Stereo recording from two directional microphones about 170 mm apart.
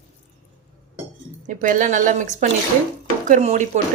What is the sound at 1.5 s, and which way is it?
A woman's voice, 50° right (ahead or behind).